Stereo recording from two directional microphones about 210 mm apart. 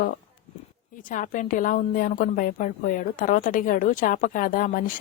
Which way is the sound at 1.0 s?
40° left (ahead or behind).